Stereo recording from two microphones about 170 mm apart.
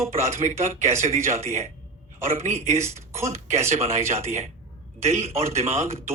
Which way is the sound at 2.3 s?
45° right (ahead or behind).